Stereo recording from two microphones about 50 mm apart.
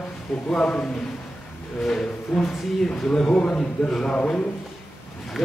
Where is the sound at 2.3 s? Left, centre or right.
Centre.